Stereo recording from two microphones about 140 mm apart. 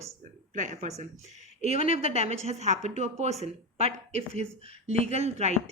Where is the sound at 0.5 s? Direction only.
65° right (ahead or behind).